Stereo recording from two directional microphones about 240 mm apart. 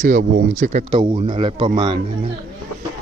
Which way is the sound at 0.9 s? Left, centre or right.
Right.